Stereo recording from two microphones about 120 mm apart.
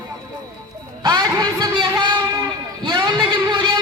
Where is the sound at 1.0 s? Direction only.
35° right (ahead or behind).